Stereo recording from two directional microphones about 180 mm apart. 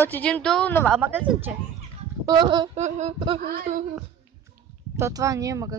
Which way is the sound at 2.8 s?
40° right (ahead or behind).